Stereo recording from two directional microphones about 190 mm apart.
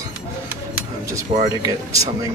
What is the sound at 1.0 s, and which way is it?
Speech, 15° right (ahead or behind).